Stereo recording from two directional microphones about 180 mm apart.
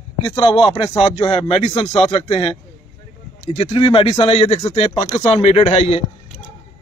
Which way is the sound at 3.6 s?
30° left (ahead or behind).